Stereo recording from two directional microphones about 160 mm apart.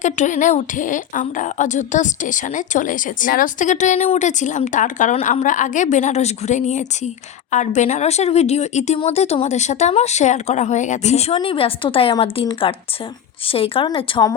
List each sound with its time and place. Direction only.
0.0 s a woman's voice: 50° left (ahead or behind); by 14.3 s 30° left (ahead or behind)